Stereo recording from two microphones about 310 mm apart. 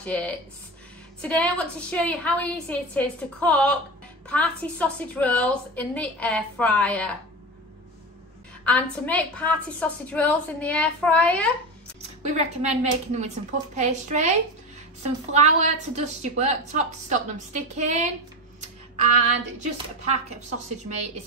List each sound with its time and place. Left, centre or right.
0.0 s a woman's voice: centre
8.6 s a woman's voice: centre
12.0 s a woman's voice: right
15.3 s a woman's voice: right
18.6 s a sound: right
20.0 s a woman's voice: right